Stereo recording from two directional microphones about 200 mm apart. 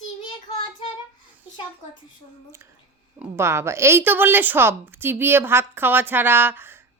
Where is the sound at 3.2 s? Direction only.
15° right (ahead or behind).